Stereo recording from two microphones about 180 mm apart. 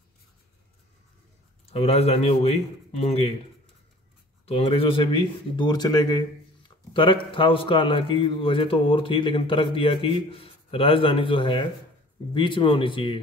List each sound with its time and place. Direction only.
1.7 s a man's voice: 35° left (ahead or behind)
4.5 s a man's voice: 35° left (ahead or behind)